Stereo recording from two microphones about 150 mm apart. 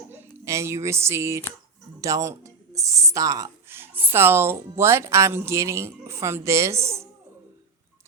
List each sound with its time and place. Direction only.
0.1 s speech: 15° right (ahead or behind)